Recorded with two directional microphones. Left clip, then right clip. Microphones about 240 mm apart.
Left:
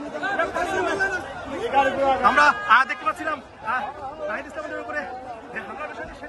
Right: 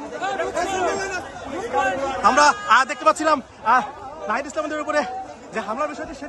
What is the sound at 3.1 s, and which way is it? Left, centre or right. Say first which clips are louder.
Speech: right 8 dB; centre.